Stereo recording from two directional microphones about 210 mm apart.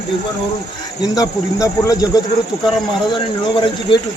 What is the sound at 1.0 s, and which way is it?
Speech, 15° left (ahead or behind).